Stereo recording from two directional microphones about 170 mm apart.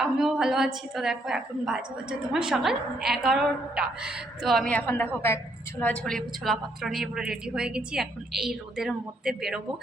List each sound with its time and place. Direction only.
0.0 s a woman's voice: 5° right (ahead or behind)